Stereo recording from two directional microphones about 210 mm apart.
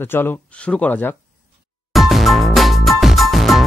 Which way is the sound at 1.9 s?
Centre (ahead or behind).